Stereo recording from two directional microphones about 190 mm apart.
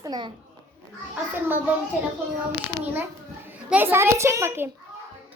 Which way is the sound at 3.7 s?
10° right (ahead or behind).